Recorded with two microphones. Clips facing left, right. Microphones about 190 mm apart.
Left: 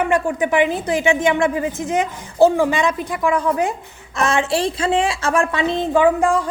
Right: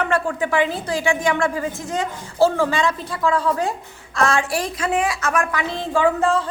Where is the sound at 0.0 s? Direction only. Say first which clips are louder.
Left 3 dB; 15° left (ahead or behind).